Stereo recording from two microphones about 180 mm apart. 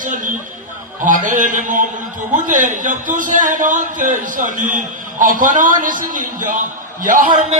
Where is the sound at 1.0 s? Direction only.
45° right (ahead or behind).